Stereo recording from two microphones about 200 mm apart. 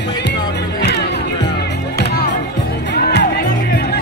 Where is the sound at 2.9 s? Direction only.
50° left (ahead or behind).